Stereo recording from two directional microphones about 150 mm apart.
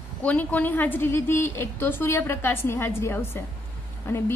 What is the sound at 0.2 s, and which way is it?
A woman's voice, 10° left (ahead or behind).